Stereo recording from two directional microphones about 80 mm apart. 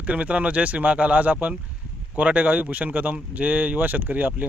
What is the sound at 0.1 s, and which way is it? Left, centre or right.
Speech, centre.